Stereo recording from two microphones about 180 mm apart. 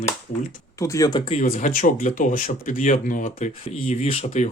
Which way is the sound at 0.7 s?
15° left (ahead or behind).